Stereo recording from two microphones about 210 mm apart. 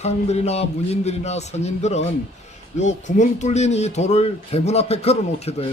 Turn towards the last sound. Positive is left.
turn(degrees=30)  # may be behind; listen again after turning